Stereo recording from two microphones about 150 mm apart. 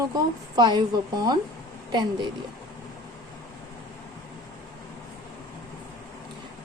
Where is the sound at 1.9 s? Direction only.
30° right (ahead or behind).